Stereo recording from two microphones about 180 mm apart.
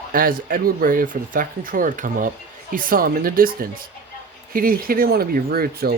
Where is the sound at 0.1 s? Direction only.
50° right (ahead or behind).